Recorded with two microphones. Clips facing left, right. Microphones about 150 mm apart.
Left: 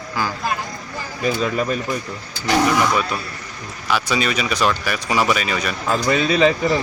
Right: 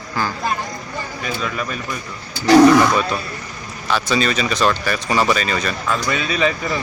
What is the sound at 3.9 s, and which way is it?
Speech, 10° left (ahead or behind).